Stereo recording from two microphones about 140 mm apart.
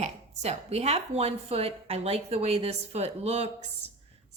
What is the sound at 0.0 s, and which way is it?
A woman's voice, 50° right (ahead or behind).